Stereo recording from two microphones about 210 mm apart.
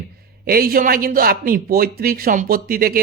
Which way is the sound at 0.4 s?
45° right (ahead or behind).